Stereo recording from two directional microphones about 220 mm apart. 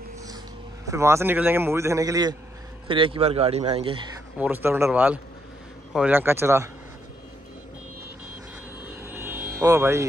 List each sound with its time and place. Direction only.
0.8 s a man's voice: 10° right (ahead or behind)
4.4 s a man's voice: 10° right (ahead or behind)
9.0 s vehicle: 10° right (ahead or behind)